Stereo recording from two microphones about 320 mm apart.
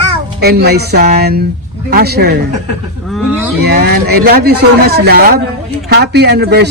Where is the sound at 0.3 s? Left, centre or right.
Right.